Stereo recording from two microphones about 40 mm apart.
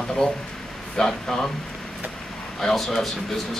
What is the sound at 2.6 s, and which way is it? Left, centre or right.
Speech, centre.